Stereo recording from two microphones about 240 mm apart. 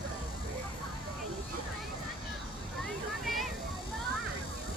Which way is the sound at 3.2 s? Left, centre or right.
Centre.